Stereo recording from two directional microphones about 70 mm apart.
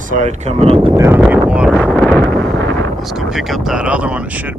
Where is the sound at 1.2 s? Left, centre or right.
Centre.